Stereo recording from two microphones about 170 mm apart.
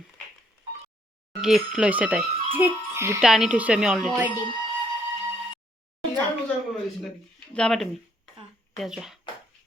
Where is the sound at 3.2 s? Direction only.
Centre (ahead or behind).